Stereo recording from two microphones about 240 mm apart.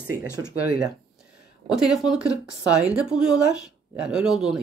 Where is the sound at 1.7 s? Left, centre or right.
Centre.